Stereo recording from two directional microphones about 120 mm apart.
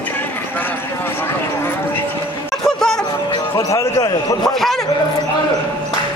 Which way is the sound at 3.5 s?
30° left (ahead or behind).